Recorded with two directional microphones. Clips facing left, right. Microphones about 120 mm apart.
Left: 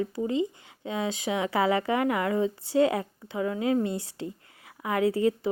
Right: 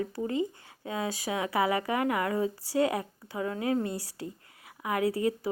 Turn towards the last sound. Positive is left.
turn(degrees=30)  # may be behind; listen again after turning